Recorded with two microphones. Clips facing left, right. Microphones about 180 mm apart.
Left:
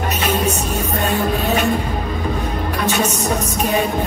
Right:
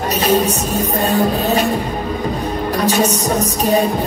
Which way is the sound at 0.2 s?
35° right (ahead or behind).